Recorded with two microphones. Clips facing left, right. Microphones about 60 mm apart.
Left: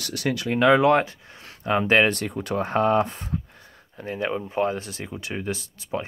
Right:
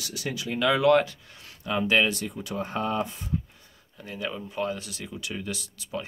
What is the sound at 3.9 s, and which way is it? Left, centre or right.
Speech, left.